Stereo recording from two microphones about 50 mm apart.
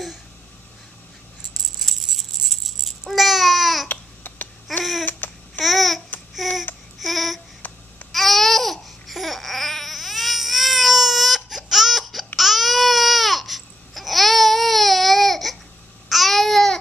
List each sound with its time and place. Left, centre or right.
1.6 s rattle: centre
3.9 s babbling: left
4.7 s babbling: centre
5.2 s babbling: left
5.6 s babbling: centre
7.0 s a sound: centre
7.6 s babbling: left
8.1 s babbling: centre
12.4 s baby cry: centre
16.1 s babbling: centre